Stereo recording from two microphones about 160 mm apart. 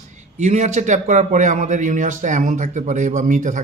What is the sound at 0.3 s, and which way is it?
Speech, 45° right (ahead or behind).